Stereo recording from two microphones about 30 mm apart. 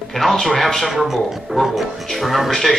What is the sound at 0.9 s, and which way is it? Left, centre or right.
Speech, centre.